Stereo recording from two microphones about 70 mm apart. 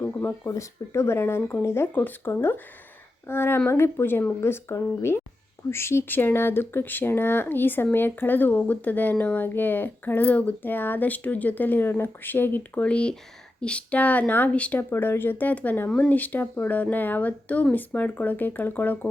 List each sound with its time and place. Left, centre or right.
0.0 s a sound: left
0.4 s speech: left
1.9 s speech: left
4.4 s speech: left
12.8 s speech: centre
14.8 s speech: left